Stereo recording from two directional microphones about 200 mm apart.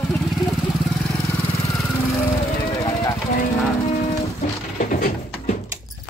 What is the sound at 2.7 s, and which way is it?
Vehicle, 20° left (ahead or behind).